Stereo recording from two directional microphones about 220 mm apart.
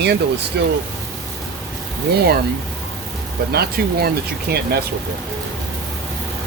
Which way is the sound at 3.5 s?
45° right (ahead or behind).